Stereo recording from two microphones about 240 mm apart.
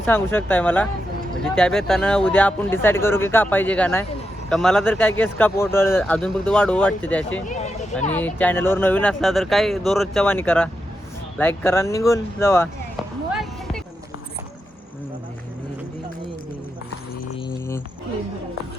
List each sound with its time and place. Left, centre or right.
0.0 s speech: centre
7.4 s speech: left
8.1 s speech: centre
13.3 s music: centre
17.3 s a sound: centre